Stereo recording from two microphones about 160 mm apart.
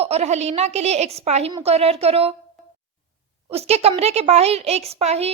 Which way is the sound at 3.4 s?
40° right (ahead or behind).